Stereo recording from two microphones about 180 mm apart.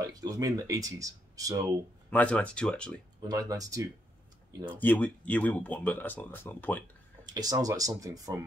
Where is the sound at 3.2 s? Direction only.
20° right (ahead or behind).